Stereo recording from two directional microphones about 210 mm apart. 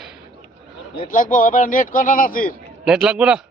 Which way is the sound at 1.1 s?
40° left (ahead or behind).